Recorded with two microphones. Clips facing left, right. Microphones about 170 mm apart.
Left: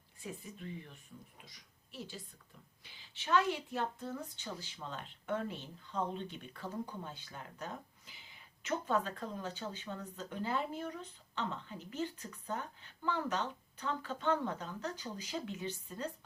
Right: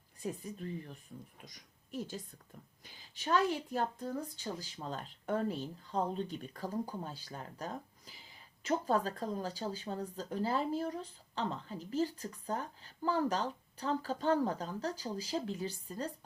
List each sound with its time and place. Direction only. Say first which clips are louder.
0.2 s a woman's voice: right 6 dB; 40° right (ahead or behind)